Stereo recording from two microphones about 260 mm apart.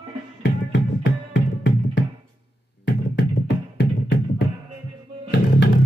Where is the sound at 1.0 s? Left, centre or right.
Left.